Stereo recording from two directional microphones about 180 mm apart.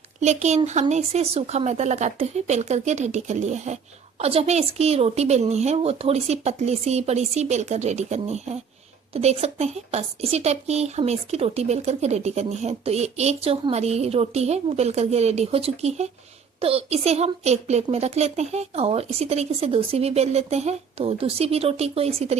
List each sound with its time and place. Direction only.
0.2 s a woman's voice: 40° right (ahead or behind)